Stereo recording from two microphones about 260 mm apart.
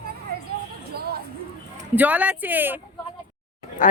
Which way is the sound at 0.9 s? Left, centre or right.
Right.